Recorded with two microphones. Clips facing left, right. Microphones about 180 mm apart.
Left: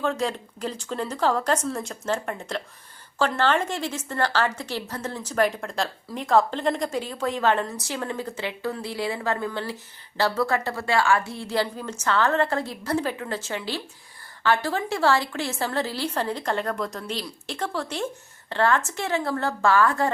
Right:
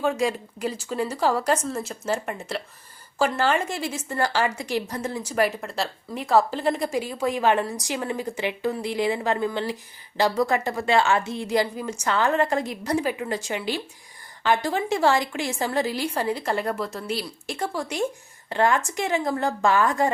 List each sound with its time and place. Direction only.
0.0 s a woman's voice: 10° right (ahead or behind)